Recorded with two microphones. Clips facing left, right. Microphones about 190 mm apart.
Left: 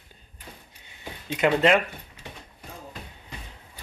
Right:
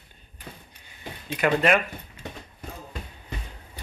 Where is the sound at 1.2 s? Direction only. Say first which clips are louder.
Left 1 dB; 20° left (ahead or behind).